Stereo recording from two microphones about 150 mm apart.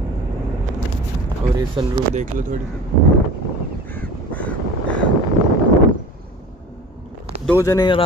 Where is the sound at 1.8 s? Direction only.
35° right (ahead or behind).